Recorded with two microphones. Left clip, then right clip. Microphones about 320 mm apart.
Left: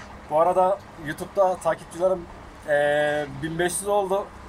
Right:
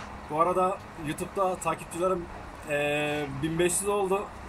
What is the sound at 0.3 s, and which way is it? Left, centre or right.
Speech, centre.